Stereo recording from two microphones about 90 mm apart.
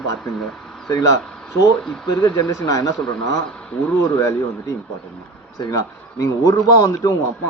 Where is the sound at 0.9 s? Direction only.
45° left (ahead or behind).